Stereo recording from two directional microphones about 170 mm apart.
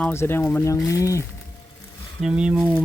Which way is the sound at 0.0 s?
15° left (ahead or behind).